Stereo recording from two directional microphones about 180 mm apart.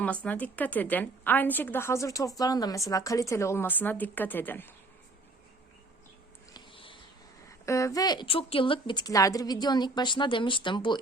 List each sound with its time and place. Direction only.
0.0 s a woman's voice: 5° left (ahead or behind)
6.5 s a sound: 30° left (ahead or behind)
7.6 s a woman's voice: 15° left (ahead or behind)